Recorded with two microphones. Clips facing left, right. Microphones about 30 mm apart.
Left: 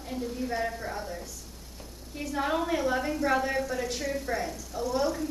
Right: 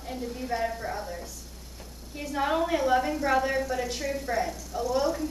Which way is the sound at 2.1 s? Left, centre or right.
Centre.